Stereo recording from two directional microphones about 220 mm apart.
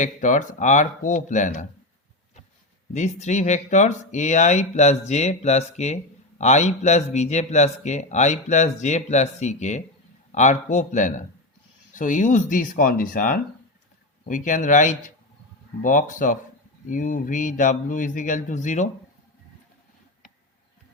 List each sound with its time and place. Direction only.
0.0 s speech: 35° left (ahead or behind)
2.9 s speech: 30° left (ahead or behind)